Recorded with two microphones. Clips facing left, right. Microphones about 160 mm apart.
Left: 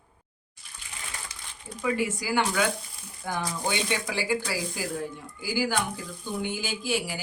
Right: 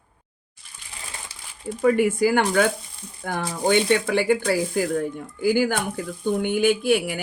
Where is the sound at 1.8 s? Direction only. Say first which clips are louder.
Right 10 dB; 55° right (ahead or behind).